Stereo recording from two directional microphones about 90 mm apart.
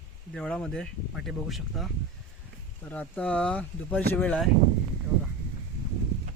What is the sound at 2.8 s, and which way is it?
Speech, 15° left (ahead or behind).